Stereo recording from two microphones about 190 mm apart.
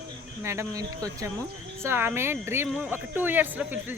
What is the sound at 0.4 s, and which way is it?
Speech, 15° right (ahead or behind).